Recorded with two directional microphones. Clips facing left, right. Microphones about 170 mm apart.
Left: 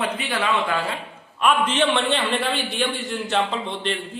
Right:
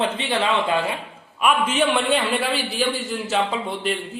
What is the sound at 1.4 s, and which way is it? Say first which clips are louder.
A man's voice: even; 10° right (ahead or behind).